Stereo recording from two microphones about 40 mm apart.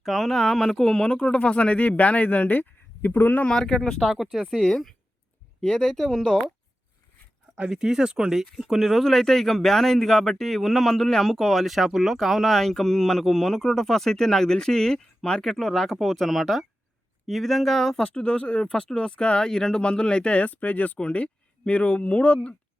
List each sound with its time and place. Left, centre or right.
0.0 s speech: centre
1.0 s speech: left
3.5 s speech: centre
4.3 s speech: centre
5.8 s speech: centre
7.7 s speech: centre
8.3 s speech: centre
9.0 s speech: centre
11.6 s speech: centre
15.4 s speech: centre
17.9 s speech: centre
18.2 s speech: left